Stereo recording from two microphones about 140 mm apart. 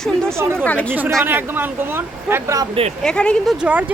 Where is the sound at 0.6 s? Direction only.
10° left (ahead or behind).